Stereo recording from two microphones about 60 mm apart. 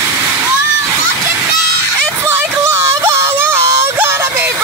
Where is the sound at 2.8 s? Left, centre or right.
Right.